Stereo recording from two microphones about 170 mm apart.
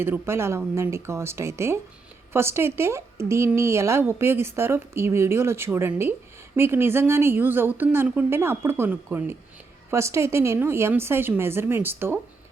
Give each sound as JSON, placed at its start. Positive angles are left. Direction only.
{"t": 0.0, "sound": "speech", "side_deg": -15}